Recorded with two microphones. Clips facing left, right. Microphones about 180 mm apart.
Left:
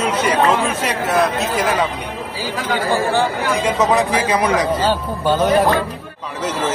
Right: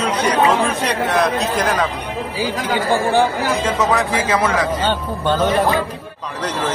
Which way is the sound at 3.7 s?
20° left (ahead or behind).